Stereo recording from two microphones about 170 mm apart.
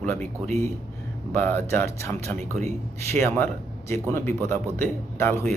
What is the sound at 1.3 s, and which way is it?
Speech, 10° left (ahead or behind).